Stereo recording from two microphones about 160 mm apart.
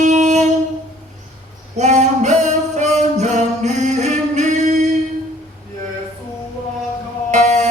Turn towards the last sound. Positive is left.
turn(degrees=-45)  # may be behind; listen again after turning